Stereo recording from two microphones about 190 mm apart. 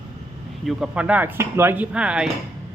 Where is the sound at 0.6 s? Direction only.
5° right (ahead or behind).